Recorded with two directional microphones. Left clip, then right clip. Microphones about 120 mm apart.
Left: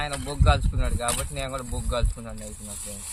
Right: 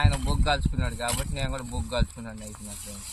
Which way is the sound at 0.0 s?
20° left (ahead or behind).